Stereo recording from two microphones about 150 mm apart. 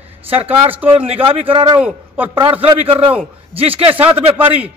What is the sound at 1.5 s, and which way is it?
Speech, 35° right (ahead or behind).